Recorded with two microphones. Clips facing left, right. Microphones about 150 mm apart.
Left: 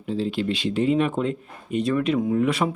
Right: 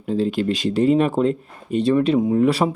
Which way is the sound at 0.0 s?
45° right (ahead or behind).